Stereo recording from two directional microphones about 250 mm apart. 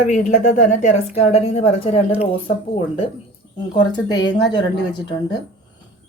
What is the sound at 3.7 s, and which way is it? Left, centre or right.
Speech, centre.